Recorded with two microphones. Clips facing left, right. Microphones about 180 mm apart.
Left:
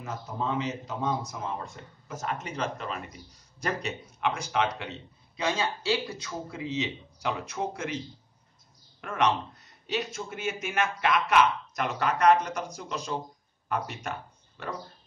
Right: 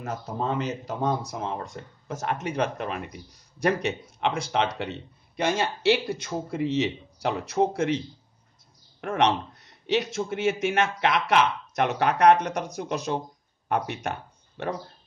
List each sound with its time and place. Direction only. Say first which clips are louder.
0.0 s speech: right 3 dB; 65° right (ahead or behind)
2.0 s speech: right 5 dB; 55° right (ahead or behind)
3.5 s speech: right 7 dB; 70° right (ahead or behind)
6.2 s speech: right 7 dB; 60° right (ahead or behind)
9.0 s speech: right 4 dB; 60° right (ahead or behind)
9.8 s speech: right 7 dB; 75° right (ahead or behind)